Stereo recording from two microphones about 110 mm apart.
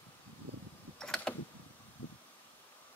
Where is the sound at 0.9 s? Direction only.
5° left (ahead or behind).